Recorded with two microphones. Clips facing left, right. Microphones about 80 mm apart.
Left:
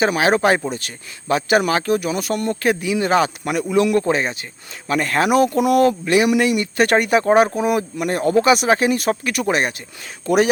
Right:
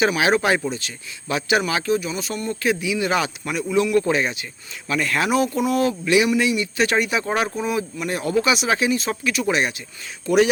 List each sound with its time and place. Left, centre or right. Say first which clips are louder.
0.0 s speech: left 2 dB; left
3.7 s speech: left 2 dB; left
4.0 s speech: left 2 dB; left
5.3 s speech: left 7 dB; left
6.4 s speech: left 3 dB; left
7.4 s speech: left 5 dB; left